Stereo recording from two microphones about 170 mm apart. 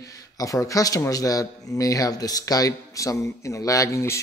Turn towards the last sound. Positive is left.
turn(degrees=15)  # may be behind; listen again after turning